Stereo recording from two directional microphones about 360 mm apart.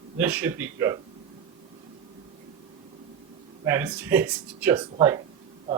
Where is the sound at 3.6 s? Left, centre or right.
Centre.